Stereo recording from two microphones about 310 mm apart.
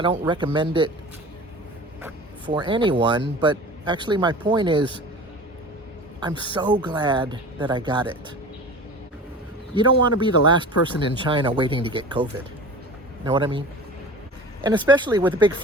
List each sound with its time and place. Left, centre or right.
0.0 s speech: centre
2.0 s speech: centre
6.1 s speech: centre
9.7 s speech: centre